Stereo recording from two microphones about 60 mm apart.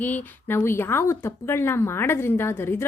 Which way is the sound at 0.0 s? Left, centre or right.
Left.